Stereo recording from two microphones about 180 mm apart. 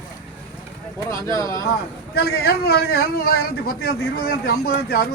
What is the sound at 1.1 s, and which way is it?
Speech, 15° left (ahead or behind).